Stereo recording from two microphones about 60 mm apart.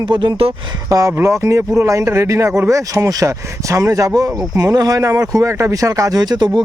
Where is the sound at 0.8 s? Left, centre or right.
Right.